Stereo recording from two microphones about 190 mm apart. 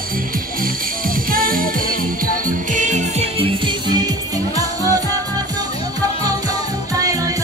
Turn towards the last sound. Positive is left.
turn(degrees=-20)  # may be behind; listen again after turning